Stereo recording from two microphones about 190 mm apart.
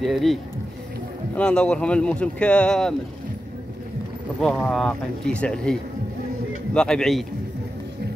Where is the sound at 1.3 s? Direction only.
5° left (ahead or behind).